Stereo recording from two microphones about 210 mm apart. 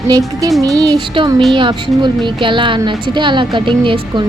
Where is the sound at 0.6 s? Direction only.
15° right (ahead or behind).